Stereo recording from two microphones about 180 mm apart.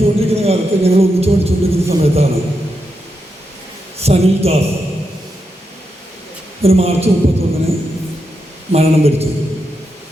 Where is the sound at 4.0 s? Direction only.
35° right (ahead or behind).